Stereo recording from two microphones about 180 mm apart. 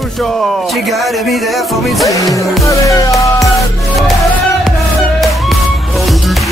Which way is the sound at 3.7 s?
Centre (ahead or behind).